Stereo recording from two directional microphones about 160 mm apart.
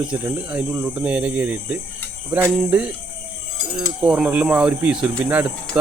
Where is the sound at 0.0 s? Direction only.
5° right (ahead or behind).